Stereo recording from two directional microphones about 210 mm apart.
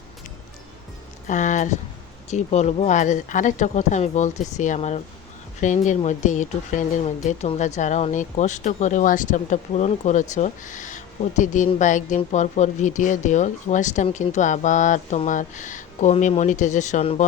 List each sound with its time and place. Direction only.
1.3 s speech: 35° left (ahead or behind)